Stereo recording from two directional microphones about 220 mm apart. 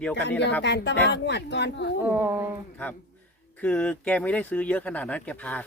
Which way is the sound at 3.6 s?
5° left (ahead or behind).